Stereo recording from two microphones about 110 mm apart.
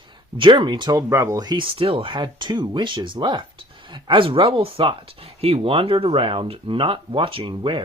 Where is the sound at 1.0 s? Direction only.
25° right (ahead or behind).